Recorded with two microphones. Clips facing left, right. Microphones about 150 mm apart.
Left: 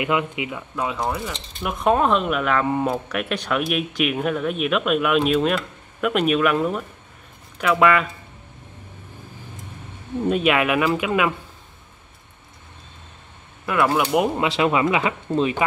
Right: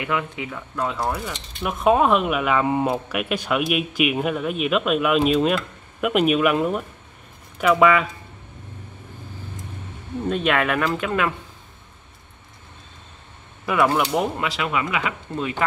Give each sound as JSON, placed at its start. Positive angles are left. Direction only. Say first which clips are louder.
{"t": 0.0, "sound": "speech", "louder": "left 3 dB", "side_deg": 15}
{"t": 0.7, "sound": "speech", "louder": "even", "side_deg": 0}
{"t": 10.2, "sound": "speech", "louder": "left 2 dB", "side_deg": 5}
{"t": 13.7, "sound": "speech", "louder": "even", "side_deg": 0}
{"t": 14.1, "sound": "speech", "louder": "left 3 dB", "side_deg": 20}